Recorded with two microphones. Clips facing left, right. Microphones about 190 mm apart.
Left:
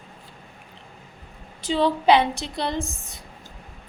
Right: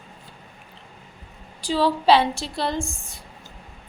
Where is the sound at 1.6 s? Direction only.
20° left (ahead or behind).